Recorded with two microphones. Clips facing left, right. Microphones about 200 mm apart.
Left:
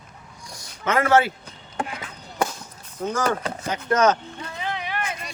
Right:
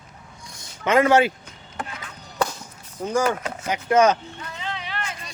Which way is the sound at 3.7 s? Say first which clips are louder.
Right 2 dB; 10° right (ahead or behind).